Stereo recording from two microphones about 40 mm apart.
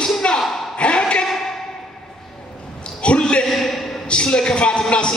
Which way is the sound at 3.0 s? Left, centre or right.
Left.